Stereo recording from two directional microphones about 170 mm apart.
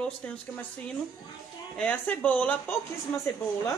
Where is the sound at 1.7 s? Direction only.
10° left (ahead or behind).